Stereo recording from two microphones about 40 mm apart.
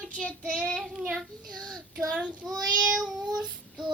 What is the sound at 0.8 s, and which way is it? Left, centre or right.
Child singing, centre.